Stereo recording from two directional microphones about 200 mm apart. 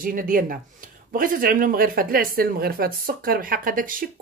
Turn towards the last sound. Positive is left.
turn(degrees=-45)  # may be behind; listen again after turning